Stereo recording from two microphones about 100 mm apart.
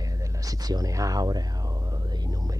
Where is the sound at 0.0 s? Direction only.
35° right (ahead or behind).